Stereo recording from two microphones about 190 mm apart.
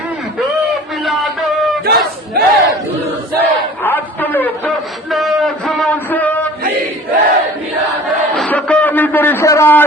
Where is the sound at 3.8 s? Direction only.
10° left (ahead or behind).